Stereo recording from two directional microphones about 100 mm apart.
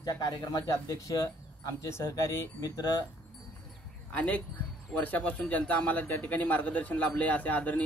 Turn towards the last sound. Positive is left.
turn(degrees=15)  # may be behind; listen again after turning